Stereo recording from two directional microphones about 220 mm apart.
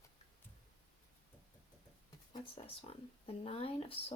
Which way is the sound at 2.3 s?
25° left (ahead or behind).